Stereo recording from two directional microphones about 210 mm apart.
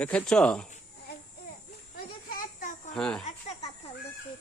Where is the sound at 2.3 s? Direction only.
40° left (ahead or behind).